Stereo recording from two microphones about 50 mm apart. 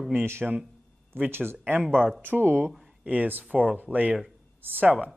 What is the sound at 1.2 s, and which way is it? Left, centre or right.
Speech, right.